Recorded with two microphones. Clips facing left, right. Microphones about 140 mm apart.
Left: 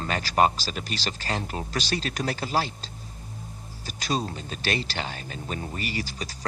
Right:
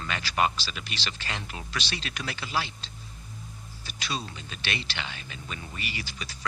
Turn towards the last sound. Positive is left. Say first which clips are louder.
# left 6 dB
turn(degrees=40)  # may be behind; listen again after turning